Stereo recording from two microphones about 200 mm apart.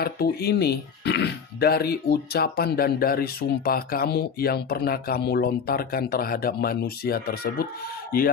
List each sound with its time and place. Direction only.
0.0 s speech: 50° left (ahead or behind)